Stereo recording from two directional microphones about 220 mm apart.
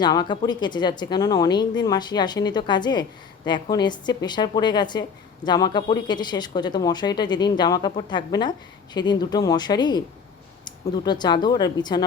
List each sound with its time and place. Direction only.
0.0 s speech: 20° left (ahead or behind)